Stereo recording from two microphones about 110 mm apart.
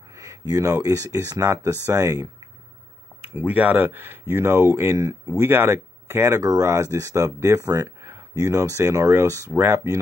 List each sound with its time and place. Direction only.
0.1 s speech: 30° right (ahead or behind)
3.3 s speech: 15° right (ahead or behind)